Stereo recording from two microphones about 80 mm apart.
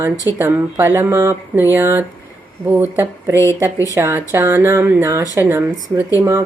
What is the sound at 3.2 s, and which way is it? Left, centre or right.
A woman's voice, right.